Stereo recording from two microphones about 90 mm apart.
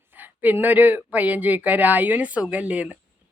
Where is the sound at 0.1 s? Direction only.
20° right (ahead or behind).